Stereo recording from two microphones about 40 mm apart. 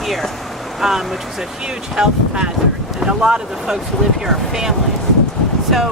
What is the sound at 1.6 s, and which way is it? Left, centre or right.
Speech, centre.